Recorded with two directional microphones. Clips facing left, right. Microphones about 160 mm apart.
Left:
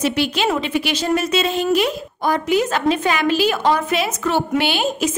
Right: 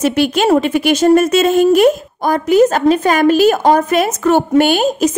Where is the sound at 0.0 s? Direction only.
50° right (ahead or behind).